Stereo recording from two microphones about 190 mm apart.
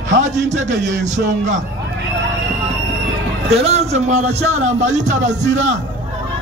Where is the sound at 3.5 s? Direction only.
35° right (ahead or behind).